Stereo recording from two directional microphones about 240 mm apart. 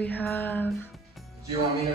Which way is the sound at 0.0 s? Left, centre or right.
Centre.